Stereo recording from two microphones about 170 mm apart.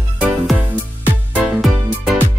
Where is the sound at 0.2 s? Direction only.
10° right (ahead or behind).